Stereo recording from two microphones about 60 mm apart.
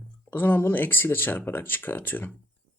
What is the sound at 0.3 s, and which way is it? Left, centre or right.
Speech, left.